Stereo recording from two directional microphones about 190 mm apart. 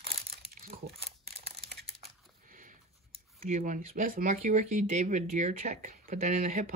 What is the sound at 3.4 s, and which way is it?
Speech, 45° right (ahead or behind).